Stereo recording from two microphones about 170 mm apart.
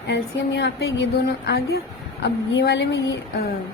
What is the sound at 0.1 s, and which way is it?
Speech, 85° left.